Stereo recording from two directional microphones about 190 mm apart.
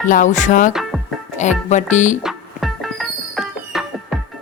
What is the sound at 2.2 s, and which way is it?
Music, centre (ahead or behind).